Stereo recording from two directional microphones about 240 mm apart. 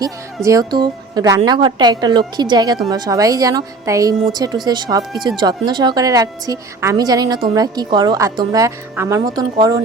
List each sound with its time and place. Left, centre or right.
0.4 s a woman's voice: centre